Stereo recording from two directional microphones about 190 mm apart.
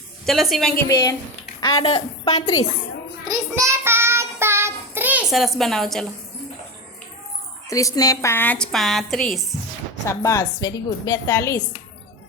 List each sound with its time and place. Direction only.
0.3 s a woman's voice: centre (ahead or behind)
0.9 s a woman's voice: 20° left (ahead or behind)
3.2 s child singing: 15° right (ahead or behind); by 6.1 s centre (ahead or behind)
7.7 s a woman's voice: 15° left (ahead or behind); by 9.6 s centre (ahead or behind)
10.1 s a woman's voice: 15° left (ahead or behind)